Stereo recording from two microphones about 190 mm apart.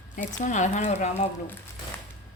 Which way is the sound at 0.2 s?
40° left (ahead or behind).